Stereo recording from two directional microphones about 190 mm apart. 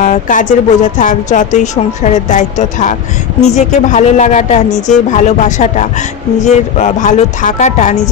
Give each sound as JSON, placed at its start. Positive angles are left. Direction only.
{"t": 0.0, "sound": "a woman's voice", "side_deg": 40}
{"t": 4.6, "sound": "speech", "side_deg": 5}
{"t": 5.1, "sound": "a woman's voice", "side_deg": 40}